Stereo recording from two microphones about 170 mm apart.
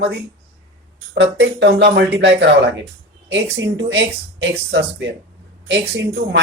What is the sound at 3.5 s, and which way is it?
Speech, 90° right.